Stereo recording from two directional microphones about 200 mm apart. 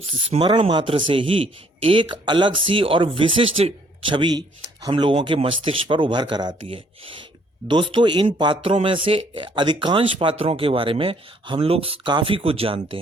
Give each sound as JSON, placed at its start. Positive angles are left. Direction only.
{"t": 0.0, "sound": "a man's voice", "side_deg": -30}